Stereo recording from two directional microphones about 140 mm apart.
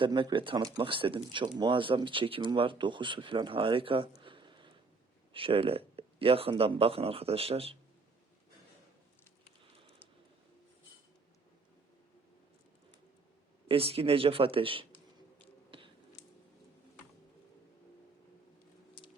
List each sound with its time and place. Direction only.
0.0 s speech: 35° right (ahead or behind)
13.7 s speech: 45° right (ahead or behind)
15.7 s a sound: 35° right (ahead or behind)